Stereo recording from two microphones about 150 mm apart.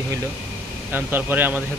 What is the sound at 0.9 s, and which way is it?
Speech, 15° right (ahead or behind).